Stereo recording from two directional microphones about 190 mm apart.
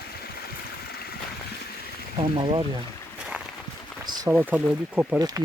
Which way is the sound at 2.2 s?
25° right (ahead or behind).